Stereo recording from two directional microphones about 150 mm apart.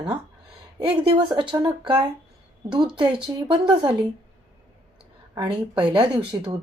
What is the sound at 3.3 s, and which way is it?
Speech, 20° right (ahead or behind).